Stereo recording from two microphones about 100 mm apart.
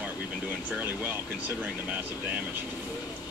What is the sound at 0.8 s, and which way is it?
Speech, 20° right (ahead or behind).